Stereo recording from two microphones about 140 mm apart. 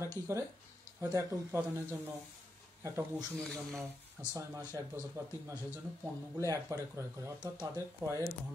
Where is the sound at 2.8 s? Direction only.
20° right (ahead or behind).